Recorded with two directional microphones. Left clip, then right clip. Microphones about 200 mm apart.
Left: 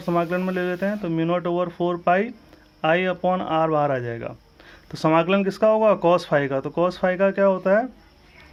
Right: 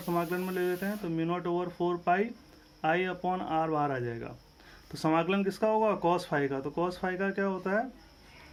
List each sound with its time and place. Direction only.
0.0 s speech: 40° left (ahead or behind)